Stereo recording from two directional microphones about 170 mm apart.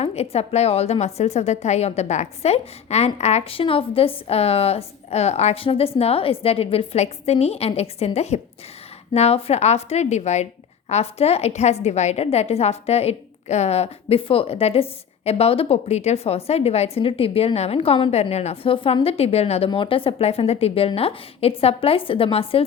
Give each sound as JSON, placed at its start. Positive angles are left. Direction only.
{"t": 0.0, "sound": "a woman's voice", "side_deg": 40}